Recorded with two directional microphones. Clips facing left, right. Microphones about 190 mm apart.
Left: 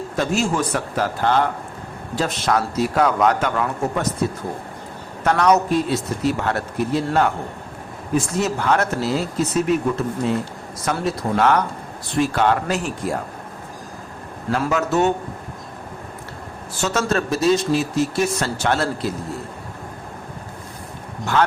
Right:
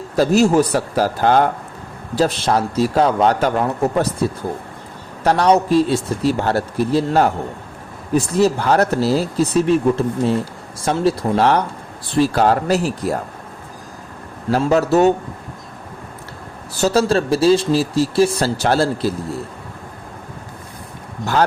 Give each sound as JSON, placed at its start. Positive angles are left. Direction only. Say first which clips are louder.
{"t": 0.2, "sound": "speech", "louder": "right 8 dB", "side_deg": -40}
{"t": 5.2, "sound": "speech", "louder": "right 2 dB", "side_deg": -30}
{"t": 14.5, "sound": "speech", "louder": "right 5 dB", "side_deg": -35}
{"t": 16.7, "sound": "speech", "louder": "right 5 dB", "side_deg": -35}